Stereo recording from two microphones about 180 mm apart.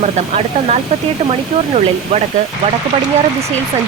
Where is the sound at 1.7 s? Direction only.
35° right (ahead or behind).